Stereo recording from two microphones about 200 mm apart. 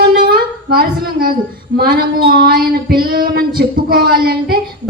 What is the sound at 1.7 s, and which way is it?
Female singing, 50° right (ahead or behind).